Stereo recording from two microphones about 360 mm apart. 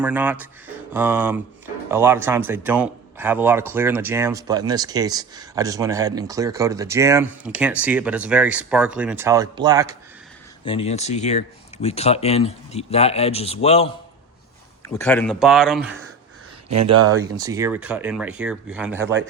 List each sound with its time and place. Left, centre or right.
0.0 s speech: centre
10.7 s speech: centre
14.9 s speech: centre
17.2 s speech: centre